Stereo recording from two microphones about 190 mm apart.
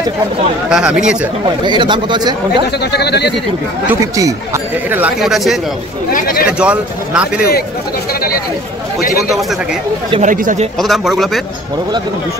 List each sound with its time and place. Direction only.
0.7 s speech: 5° right (ahead or behind)
1.4 s speech: 25° right (ahead or behind)
2.8 s speech: 60° left (ahead or behind)
3.8 s speech: 10° right (ahead or behind)
6.1 s speech: 45° left (ahead or behind)
6.6 s speech: 5° right (ahead or behind)
10.2 s speech: 40° right (ahead or behind)
10.8 s speech: centre (ahead or behind)